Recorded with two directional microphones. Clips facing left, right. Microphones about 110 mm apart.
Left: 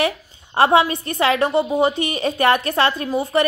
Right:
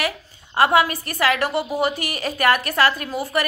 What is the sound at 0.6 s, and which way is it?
A woman's voice, 25° left (ahead or behind).